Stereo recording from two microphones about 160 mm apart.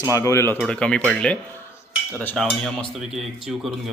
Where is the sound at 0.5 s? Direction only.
5° left (ahead or behind).